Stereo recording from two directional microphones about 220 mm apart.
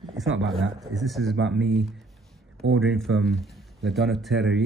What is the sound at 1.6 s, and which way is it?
Speech, centre (ahead or behind).